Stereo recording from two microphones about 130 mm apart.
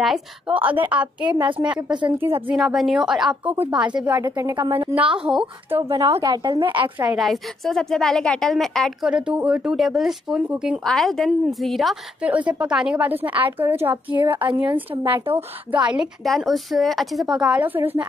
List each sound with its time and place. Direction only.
0.0 s speech: centre (ahead or behind)
0.6 s a woman's voice: 15° right (ahead or behind)
1.9 s a woman's voice: 35° right (ahead or behind)
2.5 s a woman's voice: centre (ahead or behind)
4.2 s a woman's voice: 25° right (ahead or behind)
4.7 s a woman's voice: 10° right (ahead or behind)
6.1 s a woman's voice: 30° right (ahead or behind)
7.2 s speech: centre (ahead or behind)
9.1 s speech: 10° right (ahead or behind)
12.3 s a woman's voice: 10° right (ahead or behind)
14.2 s a woman's voice: 40° right (ahead or behind)
14.6 s a woman's voice: 15° right (ahead or behind)